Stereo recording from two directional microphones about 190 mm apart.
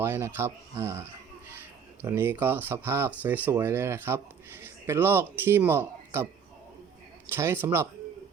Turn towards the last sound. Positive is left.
turn(degrees=-10)  # may be behind; listen again after turning